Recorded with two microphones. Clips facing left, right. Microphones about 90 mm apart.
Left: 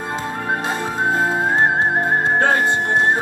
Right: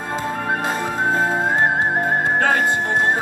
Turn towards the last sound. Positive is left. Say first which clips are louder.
# left 1 dB
turn(degrees=20)  # may be behind; listen again after turning